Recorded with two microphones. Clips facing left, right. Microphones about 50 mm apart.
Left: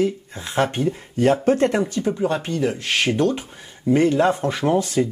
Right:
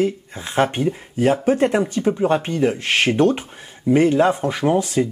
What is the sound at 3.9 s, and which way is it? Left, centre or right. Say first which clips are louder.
Speech: right 2 dB; centre.